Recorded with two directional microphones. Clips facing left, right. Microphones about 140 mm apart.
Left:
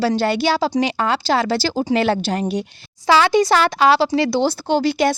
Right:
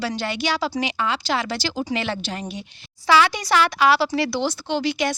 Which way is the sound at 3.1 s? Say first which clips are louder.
Left 4 dB; 30° left (ahead or behind).